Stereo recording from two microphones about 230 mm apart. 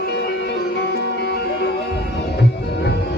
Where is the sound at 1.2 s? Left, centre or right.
Left.